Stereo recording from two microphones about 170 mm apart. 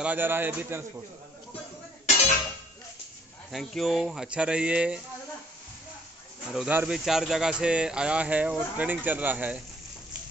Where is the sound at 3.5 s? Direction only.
Centre (ahead or behind).